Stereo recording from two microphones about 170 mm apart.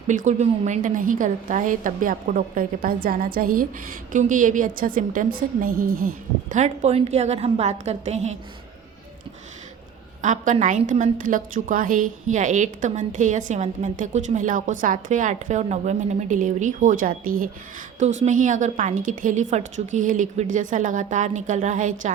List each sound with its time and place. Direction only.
0.1 s a woman's voice: 45° right (ahead or behind)
10.2 s a woman's voice: 50° right (ahead or behind)
18.0 s a woman's voice: 45° right (ahead or behind)